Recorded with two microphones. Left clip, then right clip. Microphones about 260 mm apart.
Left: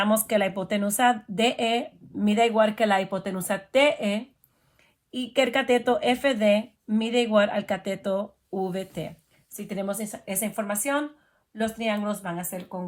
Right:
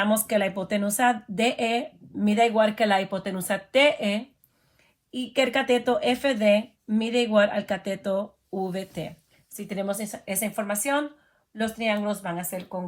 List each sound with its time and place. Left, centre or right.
0.3 s speech: left
5.2 s speech: left